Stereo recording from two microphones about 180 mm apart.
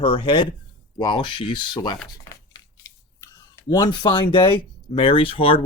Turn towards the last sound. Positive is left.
turn(degrees=30)  # may be behind; listen again after turning